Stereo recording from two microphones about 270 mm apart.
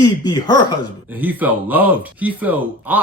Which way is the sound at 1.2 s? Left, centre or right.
Centre.